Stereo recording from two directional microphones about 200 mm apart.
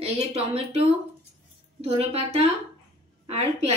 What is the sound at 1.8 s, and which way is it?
Speech, 30° right (ahead or behind).